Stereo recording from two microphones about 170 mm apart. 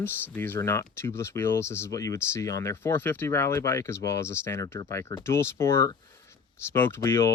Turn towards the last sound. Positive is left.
turn(degrees=15)  # may be behind; listen again after turning